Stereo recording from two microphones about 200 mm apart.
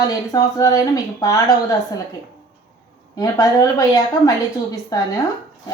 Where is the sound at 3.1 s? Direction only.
15° left (ahead or behind).